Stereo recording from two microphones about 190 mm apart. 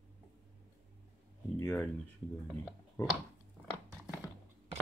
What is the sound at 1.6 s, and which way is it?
Speech, 15° left (ahead or behind).